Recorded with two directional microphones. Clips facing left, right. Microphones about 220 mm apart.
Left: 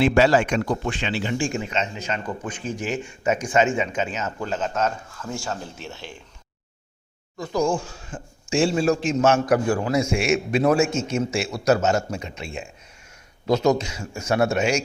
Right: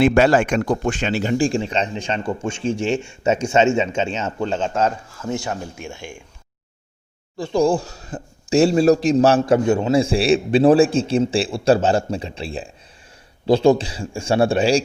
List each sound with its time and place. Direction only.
0.0 s speech: 50° right (ahead or behind); by 6.2 s 15° right (ahead or behind)
7.3 s a man's voice: 30° right (ahead or behind)